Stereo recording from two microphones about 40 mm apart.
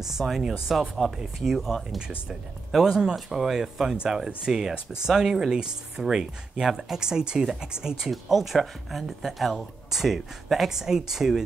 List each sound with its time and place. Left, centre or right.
0.0 s speech: centre
8.1 s speech: centre